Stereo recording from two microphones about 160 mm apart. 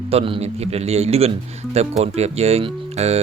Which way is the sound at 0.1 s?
40° right (ahead or behind).